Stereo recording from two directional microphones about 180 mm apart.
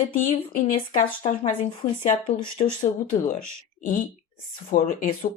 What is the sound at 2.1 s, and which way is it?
Speech, 30° left (ahead or behind).